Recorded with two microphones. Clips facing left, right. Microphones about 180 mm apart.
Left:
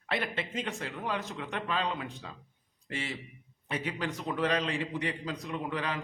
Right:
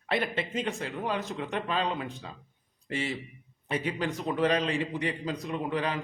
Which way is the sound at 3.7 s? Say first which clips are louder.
Right 4 dB; 30° right (ahead or behind).